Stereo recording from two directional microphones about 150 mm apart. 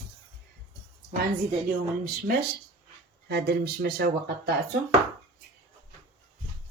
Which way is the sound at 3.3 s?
90° right.